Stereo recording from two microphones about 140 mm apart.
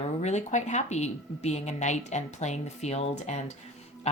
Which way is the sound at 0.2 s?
55° left (ahead or behind).